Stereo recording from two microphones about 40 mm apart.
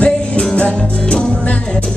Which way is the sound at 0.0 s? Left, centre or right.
Left.